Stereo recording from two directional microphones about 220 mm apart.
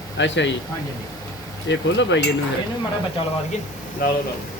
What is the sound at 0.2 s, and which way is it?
Speech, 55° left (ahead or behind).